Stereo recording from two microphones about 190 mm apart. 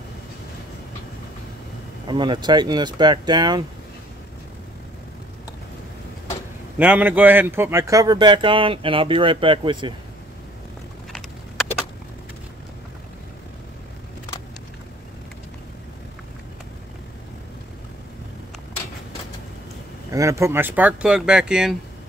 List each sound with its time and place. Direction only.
2.0 s speech: 25° right (ahead or behind)
6.8 s speech: 10° right (ahead or behind); by 9.9 s 25° right (ahead or behind)
11.1 s a sound: centre (ahead or behind)
20.1 s speech: 15° right (ahead or behind)